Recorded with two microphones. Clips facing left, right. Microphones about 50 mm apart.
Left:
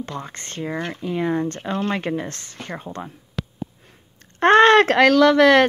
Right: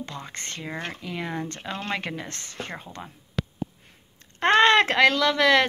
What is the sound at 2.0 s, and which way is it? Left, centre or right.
Speech, left.